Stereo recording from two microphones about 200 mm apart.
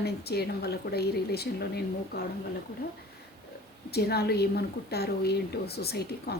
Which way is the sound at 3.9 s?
55° left (ahead or behind).